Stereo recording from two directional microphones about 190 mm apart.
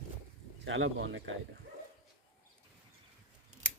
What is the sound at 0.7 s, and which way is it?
Speech, 85° right.